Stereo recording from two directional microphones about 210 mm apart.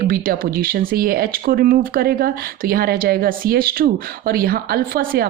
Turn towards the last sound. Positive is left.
turn(degrees=-45)  # may be behind; listen again after turning